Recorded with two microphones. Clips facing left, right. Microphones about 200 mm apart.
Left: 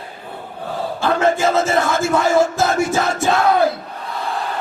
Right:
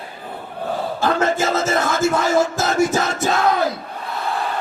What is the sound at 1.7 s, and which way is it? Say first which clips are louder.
Music: left 1 dB; 45° right (ahead or behind).